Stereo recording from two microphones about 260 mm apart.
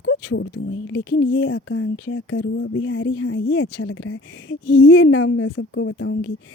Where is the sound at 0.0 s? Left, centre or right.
Left.